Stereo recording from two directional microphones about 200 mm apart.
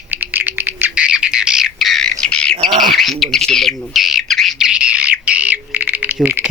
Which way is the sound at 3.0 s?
Centre (ahead or behind).